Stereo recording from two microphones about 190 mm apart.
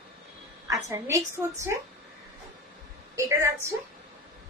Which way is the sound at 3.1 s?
15° right (ahead or behind).